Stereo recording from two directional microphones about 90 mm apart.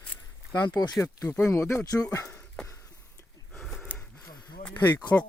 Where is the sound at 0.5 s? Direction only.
50° left (ahead or behind).